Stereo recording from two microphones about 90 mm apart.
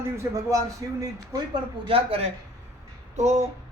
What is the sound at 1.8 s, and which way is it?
Speech, 90° right.